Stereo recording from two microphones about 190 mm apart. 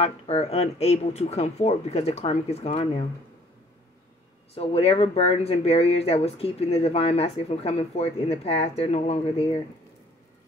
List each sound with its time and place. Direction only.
0.0 s speech: 35° left (ahead or behind)
4.6 s speech: 30° left (ahead or behind)